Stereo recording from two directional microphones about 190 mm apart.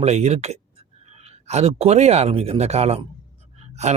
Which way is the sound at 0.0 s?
35° right (ahead or behind).